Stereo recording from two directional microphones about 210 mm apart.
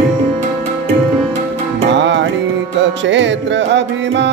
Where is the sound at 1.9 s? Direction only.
60° right (ahead or behind).